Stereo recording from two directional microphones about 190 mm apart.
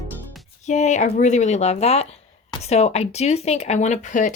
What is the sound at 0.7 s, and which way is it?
Speech, 40° left (ahead or behind).